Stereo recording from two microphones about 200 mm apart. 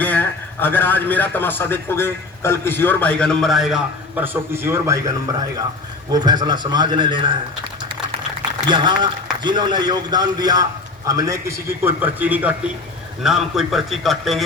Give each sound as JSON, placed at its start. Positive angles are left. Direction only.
{"t": 0.0, "sound": "a man's voice", "side_deg": 10}
{"t": 6.1, "sound": "a man's voice", "side_deg": -20}
{"t": 8.6, "sound": "a man's voice", "side_deg": -20}